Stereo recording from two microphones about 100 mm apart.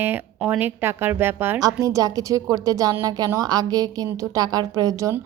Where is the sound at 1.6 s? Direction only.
35° right (ahead or behind).